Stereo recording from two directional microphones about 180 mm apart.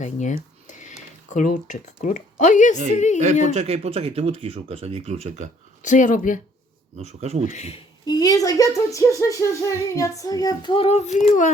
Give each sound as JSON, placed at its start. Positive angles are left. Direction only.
{"t": 0.0, "sound": "speech", "side_deg": 40}
{"t": 0.7, "sound": "a sound", "side_deg": 45}
{"t": 1.3, "sound": "speech", "side_deg": 45}
{"t": 3.5, "sound": "speech", "side_deg": -35}
{"t": 5.8, "sound": "speech", "side_deg": 45}
{"t": 6.9, "sound": "speech", "side_deg": -40}
{"t": 7.5, "sound": "speech", "side_deg": 35}
{"t": 8.0, "sound": "speech", "side_deg": 20}